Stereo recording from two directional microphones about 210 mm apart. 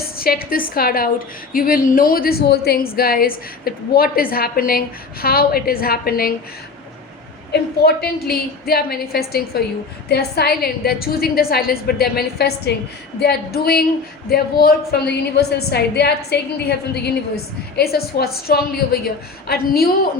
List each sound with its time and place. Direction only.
0.2 s a woman's voice: 45° left (ahead or behind)
7.5 s a woman's voice: 50° left (ahead or behind)